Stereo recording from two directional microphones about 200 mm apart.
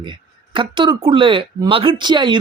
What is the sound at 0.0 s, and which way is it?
Speech, 25° right (ahead or behind).